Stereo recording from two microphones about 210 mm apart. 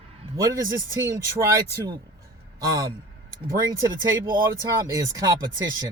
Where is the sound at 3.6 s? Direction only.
20° right (ahead or behind).